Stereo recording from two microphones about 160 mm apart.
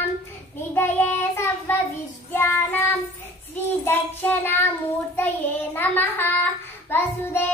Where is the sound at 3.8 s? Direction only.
10° left (ahead or behind).